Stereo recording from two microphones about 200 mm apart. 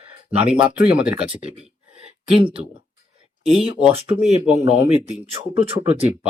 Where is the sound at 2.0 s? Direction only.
25° right (ahead or behind).